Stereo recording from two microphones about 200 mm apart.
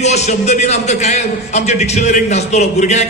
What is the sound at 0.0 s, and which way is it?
A man's voice, 35° left (ahead or behind).